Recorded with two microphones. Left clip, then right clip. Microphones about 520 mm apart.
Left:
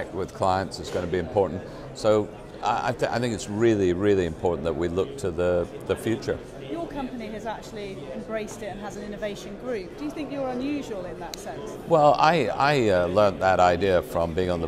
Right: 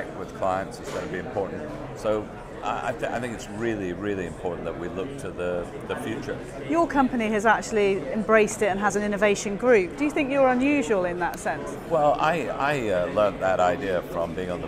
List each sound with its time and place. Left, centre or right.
0.4 s a man's voice: left
2.0 s a man's voice: left
7.2 s a woman's voice: right
11.9 s a man's voice: left